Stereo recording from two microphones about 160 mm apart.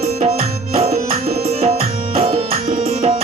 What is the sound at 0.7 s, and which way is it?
Tabla, 40° right (ahead or behind).